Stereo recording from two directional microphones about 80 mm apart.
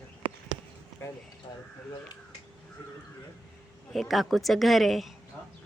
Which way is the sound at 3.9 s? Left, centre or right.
Centre.